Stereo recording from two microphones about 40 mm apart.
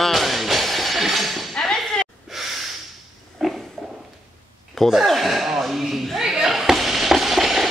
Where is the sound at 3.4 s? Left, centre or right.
Centre.